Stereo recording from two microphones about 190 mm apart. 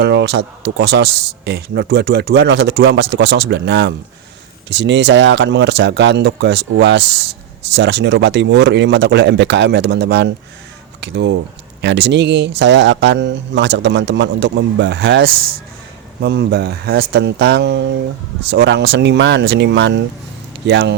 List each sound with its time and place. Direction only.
0.0 s speech: 65° right (ahead or behind)